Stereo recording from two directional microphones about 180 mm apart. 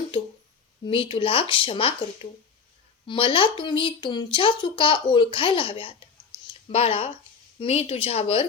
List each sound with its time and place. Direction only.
0.9 s speech: 30° left (ahead or behind)
3.1 s speech: 30° left (ahead or behind)